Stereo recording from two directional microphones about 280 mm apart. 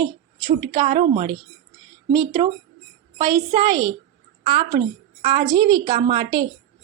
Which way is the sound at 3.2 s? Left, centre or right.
Centre.